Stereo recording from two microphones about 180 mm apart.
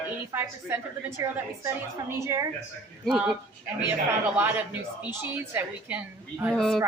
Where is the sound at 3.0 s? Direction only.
5° right (ahead or behind).